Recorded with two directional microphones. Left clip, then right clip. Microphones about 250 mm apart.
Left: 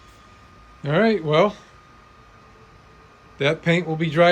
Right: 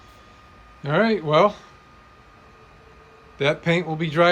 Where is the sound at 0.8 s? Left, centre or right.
Centre.